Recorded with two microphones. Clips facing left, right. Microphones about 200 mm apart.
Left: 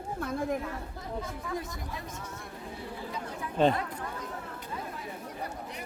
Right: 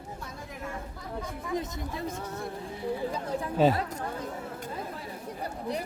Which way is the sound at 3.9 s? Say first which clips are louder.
Right 3 dB; 45° right (ahead or behind).